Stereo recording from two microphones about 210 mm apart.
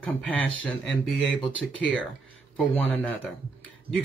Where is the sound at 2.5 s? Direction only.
5° left (ahead or behind).